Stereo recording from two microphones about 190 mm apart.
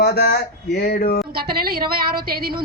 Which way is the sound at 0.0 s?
55° left (ahead or behind).